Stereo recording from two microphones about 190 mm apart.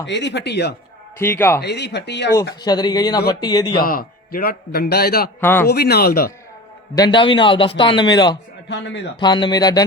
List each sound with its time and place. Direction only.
0.0 s speech: 65° left (ahead or behind)
1.2 s a man's voice: 10° left (ahead or behind)
1.6 s speech: 60° left (ahead or behind)
2.6 s a man's voice: 20° left (ahead or behind)
3.8 s a man's voice: 50° left (ahead or behind)
5.4 s a man's voice: 10° left (ahead or behind)
5.6 s speech: 55° left (ahead or behind)
6.9 s a man's voice: 20° left (ahead or behind)